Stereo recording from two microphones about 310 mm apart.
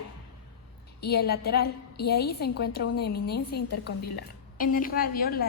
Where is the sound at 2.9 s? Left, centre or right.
Left.